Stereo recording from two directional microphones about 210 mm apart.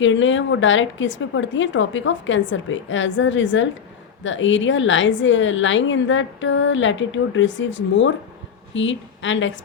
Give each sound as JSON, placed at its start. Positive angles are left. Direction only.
{"t": 0.0, "sound": "a woman's voice", "side_deg": 65}